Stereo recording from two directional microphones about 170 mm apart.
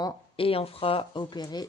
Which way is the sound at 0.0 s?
35° left (ahead or behind).